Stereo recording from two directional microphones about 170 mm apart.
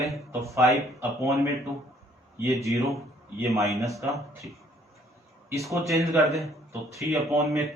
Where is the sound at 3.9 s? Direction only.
Centre (ahead or behind).